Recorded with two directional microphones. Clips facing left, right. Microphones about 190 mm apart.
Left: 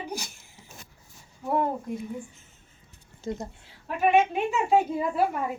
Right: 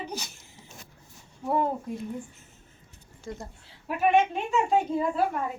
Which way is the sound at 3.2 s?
20° left (ahead or behind).